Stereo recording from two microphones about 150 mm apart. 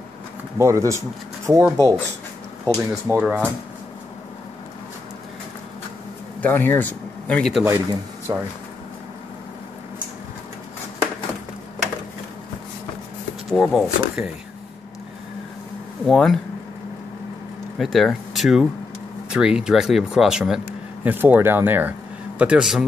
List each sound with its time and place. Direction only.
0.6 s speech: 20° right (ahead or behind)
3.2 s speech: 10° right (ahead or behind)
6.4 s speech: 15° left (ahead or behind)
8.3 s speech: 25° right (ahead or behind)
13.5 s speech: centre (ahead or behind)
16.1 s speech: centre (ahead or behind)
17.7 s speech: centre (ahead or behind)